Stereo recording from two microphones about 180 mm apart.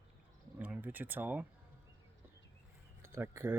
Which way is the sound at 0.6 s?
10° right (ahead or behind).